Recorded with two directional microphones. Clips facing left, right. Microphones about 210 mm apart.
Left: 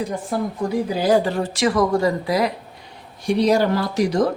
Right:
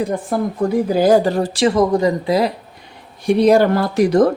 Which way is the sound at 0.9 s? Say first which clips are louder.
Right 5 dB; 45° right (ahead or behind).